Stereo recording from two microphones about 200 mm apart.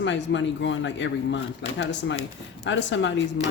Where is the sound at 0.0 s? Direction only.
65° left (ahead or behind).